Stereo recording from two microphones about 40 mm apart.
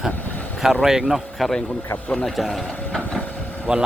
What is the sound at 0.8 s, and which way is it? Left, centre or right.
Speech, centre.